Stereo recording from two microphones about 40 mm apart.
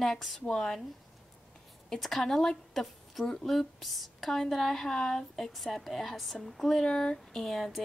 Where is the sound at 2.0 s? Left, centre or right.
Centre.